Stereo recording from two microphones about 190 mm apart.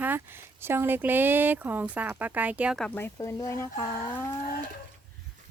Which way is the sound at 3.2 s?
20° left (ahead or behind).